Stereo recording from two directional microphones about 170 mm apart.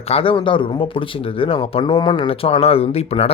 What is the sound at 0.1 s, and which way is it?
Speech, 30° left (ahead or behind).